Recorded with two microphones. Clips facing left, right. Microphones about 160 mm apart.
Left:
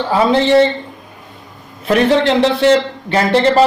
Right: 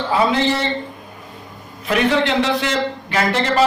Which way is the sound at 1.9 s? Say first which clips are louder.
Left 5 dB; 35° left (ahead or behind).